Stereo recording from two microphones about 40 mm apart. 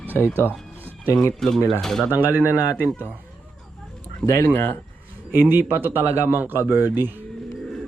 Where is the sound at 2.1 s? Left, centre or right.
Right.